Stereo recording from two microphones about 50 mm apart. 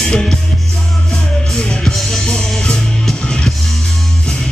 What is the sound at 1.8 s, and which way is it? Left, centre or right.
Music, centre.